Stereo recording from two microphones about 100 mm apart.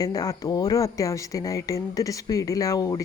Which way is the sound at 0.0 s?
40° left (ahead or behind).